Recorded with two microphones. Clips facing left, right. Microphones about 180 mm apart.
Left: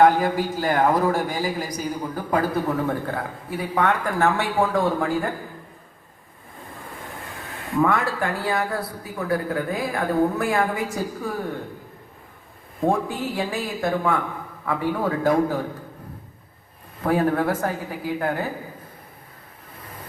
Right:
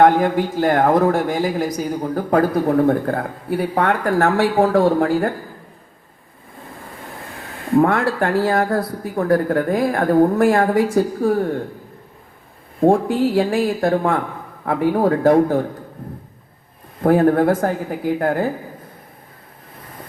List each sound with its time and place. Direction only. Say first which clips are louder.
0.0 s a man's voice: right 3 dB; 50° right (ahead or behind)
4.6 s speech: right 6 dB; 35° right (ahead or behind)
4.9 s a woman's voice: right 6 dB; 55° right (ahead or behind)
7.8 s a man's voice: right 5 dB; 55° right (ahead or behind)
10.8 s a woman's voice: right 11 dB; 55° right (ahead or behind)
12.9 s a woman's voice: right 8 dB; 55° right (ahead or behind)
17.0 s a man's voice: right 7 dB; 50° right (ahead or behind)